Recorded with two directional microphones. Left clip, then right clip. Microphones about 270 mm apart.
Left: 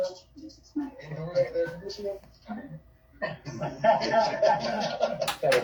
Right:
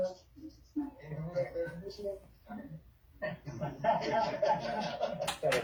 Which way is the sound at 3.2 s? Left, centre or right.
Left.